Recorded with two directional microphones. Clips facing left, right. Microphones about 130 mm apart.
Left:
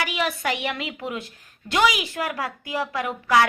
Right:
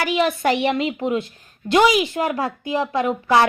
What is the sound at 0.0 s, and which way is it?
A woman's voice, 30° right (ahead or behind).